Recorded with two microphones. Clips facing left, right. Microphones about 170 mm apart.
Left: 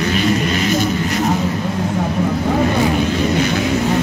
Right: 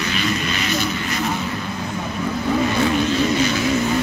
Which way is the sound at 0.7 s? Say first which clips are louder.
Left 6 dB; 45° left (ahead or behind).